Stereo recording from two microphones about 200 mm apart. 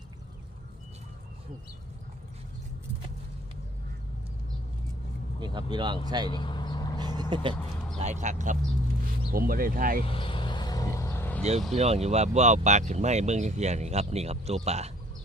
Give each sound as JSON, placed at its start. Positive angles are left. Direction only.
{"t": 5.4, "sound": "speech", "side_deg": -20}
{"t": 6.2, "sound": "vehicle", "side_deg": 25}
{"t": 7.0, "sound": "vehicle", "side_deg": -20}
{"t": 7.9, "sound": "speech", "side_deg": -35}
{"t": 10.0, "sound": "vehicle", "side_deg": 25}
{"t": 11.7, "sound": "speech", "side_deg": -30}